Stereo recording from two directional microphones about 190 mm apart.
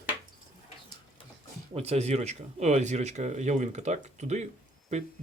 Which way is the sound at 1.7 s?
35° right (ahead or behind).